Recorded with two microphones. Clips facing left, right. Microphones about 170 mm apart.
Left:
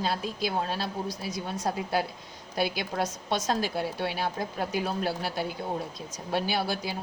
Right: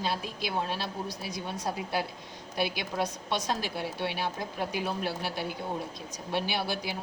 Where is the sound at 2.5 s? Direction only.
40° left (ahead or behind).